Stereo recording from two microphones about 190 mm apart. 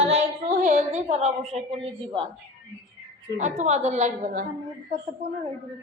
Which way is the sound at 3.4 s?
40° right (ahead or behind).